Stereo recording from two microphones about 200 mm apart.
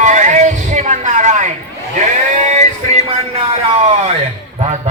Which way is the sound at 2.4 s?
35° right (ahead or behind).